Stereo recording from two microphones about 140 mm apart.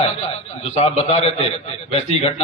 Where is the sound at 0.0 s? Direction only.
50° left (ahead or behind).